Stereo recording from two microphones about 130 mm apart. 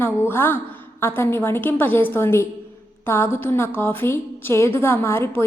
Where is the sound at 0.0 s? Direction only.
15° left (ahead or behind).